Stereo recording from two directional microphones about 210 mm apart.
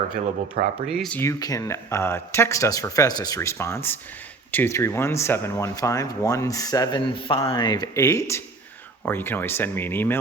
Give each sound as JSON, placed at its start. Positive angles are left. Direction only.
{"t": 0.9, "sound": "speech", "side_deg": 0}